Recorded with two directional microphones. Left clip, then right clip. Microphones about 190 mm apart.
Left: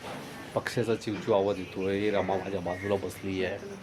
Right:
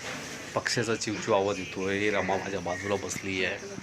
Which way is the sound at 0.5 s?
5° left (ahead or behind).